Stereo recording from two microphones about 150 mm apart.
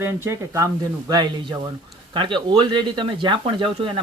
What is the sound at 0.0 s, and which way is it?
Speech, 20° right (ahead or behind).